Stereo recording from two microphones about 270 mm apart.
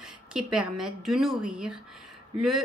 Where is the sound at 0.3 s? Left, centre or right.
Centre.